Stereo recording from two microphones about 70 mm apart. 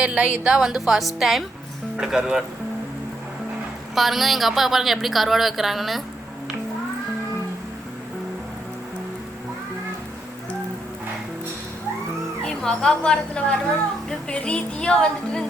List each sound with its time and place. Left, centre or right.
0.0 s a woman's voice: centre
3.9 s a woman's voice: centre
12.5 s speech: centre